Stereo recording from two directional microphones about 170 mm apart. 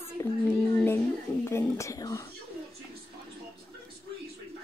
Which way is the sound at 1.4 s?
15° left (ahead or behind).